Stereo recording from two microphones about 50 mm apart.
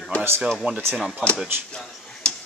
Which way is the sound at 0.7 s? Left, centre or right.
Right.